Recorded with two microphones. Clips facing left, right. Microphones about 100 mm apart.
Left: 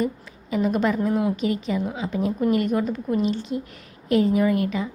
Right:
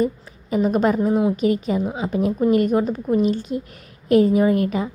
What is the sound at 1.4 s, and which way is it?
A woman's voice, 45° right (ahead or behind).